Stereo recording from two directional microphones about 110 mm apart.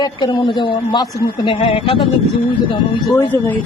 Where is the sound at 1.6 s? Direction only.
60° left (ahead or behind).